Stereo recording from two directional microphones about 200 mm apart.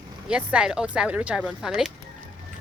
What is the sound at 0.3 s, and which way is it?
Speech, 5° right (ahead or behind).